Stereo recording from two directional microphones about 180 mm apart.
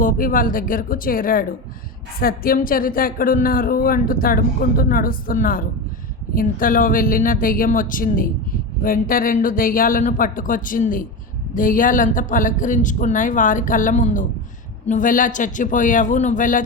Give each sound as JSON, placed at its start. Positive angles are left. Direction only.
{"t": 0.0, "sound": "speech", "side_deg": 50}